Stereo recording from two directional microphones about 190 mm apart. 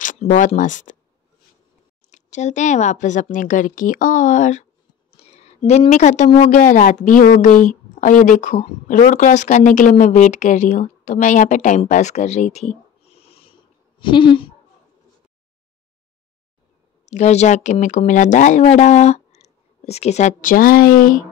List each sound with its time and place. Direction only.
0.0 s speech: 40° left (ahead or behind)
2.0 s speech: 40° left (ahead or behind)
5.2 s a sound: 35° left (ahead or behind)
5.7 s speech: 35° left (ahead or behind)
17.1 s speech: 35° left (ahead or behind)